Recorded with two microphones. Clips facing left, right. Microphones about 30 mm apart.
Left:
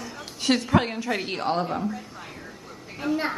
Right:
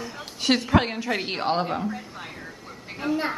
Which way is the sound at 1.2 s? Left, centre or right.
Right.